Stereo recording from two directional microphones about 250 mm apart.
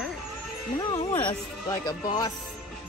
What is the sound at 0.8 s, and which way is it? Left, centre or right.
Speech, centre.